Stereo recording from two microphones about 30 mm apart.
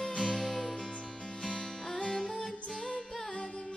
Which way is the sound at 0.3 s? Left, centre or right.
Centre.